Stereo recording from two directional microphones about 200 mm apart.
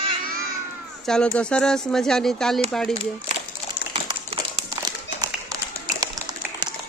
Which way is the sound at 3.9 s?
25° right (ahead or behind).